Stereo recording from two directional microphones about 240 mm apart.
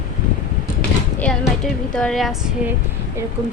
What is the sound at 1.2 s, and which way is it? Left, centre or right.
Speech, centre.